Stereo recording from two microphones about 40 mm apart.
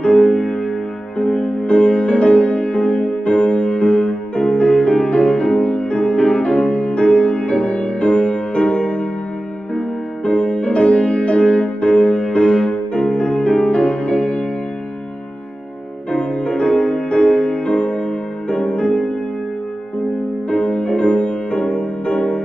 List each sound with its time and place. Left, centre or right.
0.0 s music: left
16.1 s music: left
20.4 s music: left